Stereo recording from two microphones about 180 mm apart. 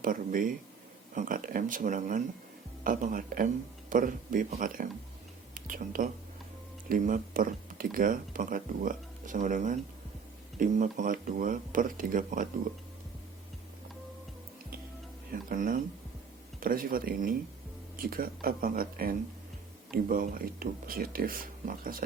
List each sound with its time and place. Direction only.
0.0 s speech: 50° right (ahead or behind)
15.3 s speech: 50° right (ahead or behind)